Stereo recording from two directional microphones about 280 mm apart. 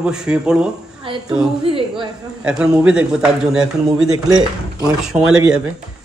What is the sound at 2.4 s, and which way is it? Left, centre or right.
A man's voice, centre.